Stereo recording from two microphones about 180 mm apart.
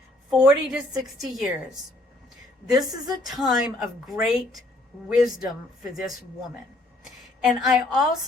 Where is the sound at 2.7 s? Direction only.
20° right (ahead or behind).